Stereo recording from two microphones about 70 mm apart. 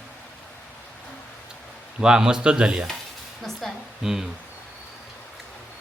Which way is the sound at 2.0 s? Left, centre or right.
Centre.